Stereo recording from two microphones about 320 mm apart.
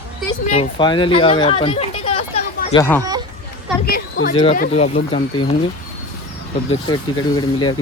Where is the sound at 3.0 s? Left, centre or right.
Centre.